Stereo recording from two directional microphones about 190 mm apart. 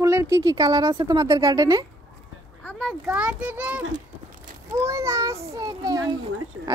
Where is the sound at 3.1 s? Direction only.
5° right (ahead or behind).